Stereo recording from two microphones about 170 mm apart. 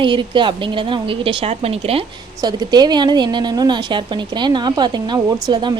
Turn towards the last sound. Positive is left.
turn(degrees=-25)  # may be behind; listen again after turning